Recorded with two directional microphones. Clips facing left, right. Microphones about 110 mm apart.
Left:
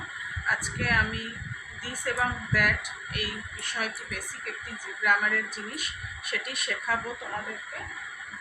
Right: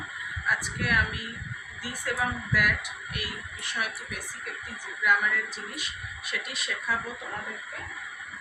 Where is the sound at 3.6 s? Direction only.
50° left (ahead or behind).